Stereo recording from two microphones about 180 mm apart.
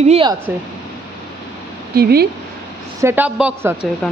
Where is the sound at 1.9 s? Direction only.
60° right (ahead or behind).